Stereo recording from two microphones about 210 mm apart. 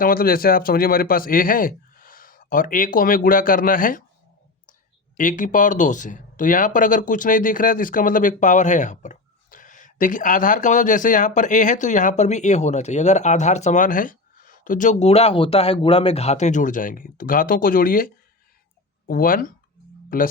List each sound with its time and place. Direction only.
0.0 s speech: 45° left (ahead or behind)
5.1 s speech: 40° left (ahead or behind)